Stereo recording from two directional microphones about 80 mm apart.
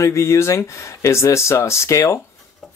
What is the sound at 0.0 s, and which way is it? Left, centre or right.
Speech, left.